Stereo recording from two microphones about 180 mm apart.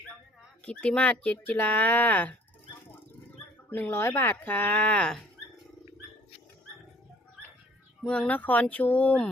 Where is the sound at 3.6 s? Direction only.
10° left (ahead or behind).